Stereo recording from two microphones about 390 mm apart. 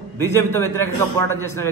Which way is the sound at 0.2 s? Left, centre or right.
Centre.